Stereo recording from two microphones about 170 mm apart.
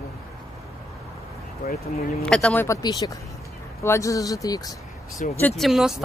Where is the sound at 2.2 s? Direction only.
5° left (ahead or behind).